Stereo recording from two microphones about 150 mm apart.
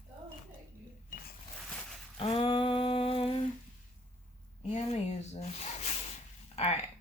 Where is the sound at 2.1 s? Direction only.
40° left (ahead or behind).